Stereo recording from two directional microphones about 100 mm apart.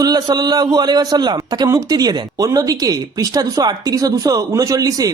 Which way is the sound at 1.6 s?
35° right (ahead or behind).